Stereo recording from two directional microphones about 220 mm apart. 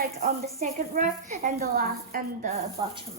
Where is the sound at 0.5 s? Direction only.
30° right (ahead or behind).